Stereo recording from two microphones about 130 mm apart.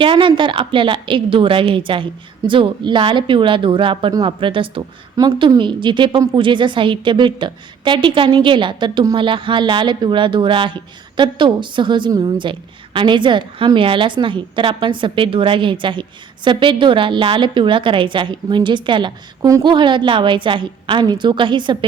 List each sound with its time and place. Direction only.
0.0 s a woman's voice: 40° right (ahead or behind)
5.1 s a woman's voice: 30° right (ahead or behind)